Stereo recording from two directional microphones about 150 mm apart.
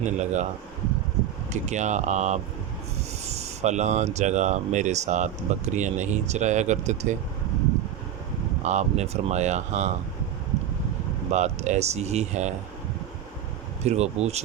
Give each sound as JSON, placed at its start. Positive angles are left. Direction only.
{"t": 0.0, "sound": "speech", "side_deg": -50}
{"t": 1.6, "sound": "speech", "side_deg": -50}
{"t": 8.6, "sound": "speech", "side_deg": -50}
{"t": 11.3, "sound": "speech", "side_deg": -50}
{"t": 13.8, "sound": "speech", "side_deg": -45}